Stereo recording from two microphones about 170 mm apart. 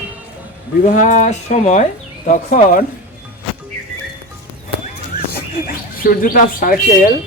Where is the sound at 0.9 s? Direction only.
45° left (ahead or behind).